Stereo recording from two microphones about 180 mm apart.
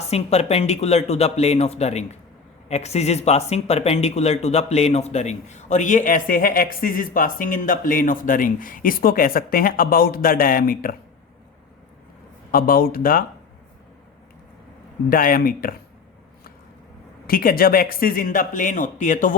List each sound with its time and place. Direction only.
0.1 s speech: 35° left (ahead or behind); by 10.9 s 55° left (ahead or behind)
12.5 s speech: 55° left (ahead or behind)
15.1 s speech: 55° left (ahead or behind)
17.2 s speech: 55° left (ahead or behind)